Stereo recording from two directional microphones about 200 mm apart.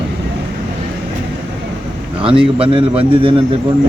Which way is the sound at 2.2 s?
25° right (ahead or behind).